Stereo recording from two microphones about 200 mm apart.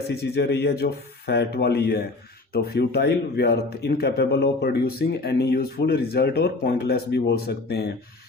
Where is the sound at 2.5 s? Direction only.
55° left (ahead or behind).